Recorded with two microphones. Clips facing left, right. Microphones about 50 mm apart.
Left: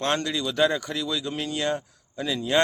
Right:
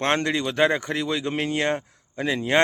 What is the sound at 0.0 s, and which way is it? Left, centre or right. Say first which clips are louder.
Speech: right 3 dB; right.